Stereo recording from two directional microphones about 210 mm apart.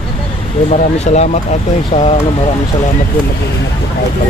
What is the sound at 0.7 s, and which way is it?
Speech, 35° left (ahead or behind).